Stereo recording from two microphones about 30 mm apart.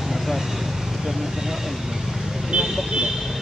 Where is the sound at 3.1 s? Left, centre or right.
Centre.